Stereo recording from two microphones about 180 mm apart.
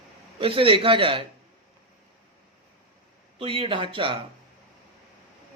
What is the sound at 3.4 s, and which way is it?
Speech, 30° right (ahead or behind).